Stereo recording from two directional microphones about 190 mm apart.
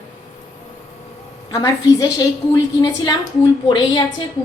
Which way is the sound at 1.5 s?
20° left (ahead or behind).